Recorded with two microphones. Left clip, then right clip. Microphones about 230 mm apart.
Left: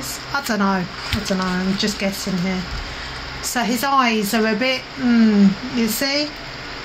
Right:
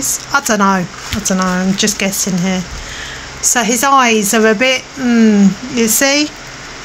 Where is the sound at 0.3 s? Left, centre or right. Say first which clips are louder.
Right 8 dB; right.